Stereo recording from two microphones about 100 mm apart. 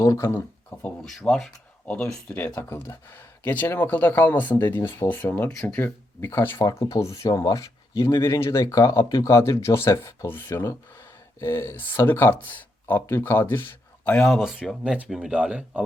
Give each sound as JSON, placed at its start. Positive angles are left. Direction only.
{"t": 0.0, "sound": "speech", "side_deg": 35}
{"t": 0.7, "sound": "speech", "side_deg": 15}
{"t": 1.1, "sound": "speech", "side_deg": 5}
{"t": 1.9, "sound": "speech", "side_deg": 15}
{"t": 14.3, "sound": "speech", "side_deg": 0}